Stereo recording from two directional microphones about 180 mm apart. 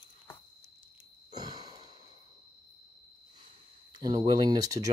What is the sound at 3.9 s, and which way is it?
Speech, 20° right (ahead or behind).